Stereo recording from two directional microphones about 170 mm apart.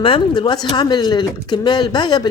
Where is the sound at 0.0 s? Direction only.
30° left (ahead or behind).